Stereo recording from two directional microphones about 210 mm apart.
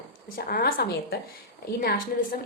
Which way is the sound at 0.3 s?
45° left (ahead or behind).